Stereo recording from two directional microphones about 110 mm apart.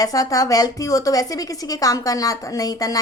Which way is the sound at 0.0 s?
35° left (ahead or behind).